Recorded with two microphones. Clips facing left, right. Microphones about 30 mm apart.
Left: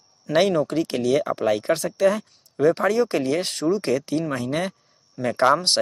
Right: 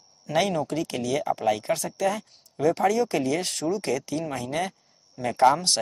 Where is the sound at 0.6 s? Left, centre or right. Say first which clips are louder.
Left 5 dB; left.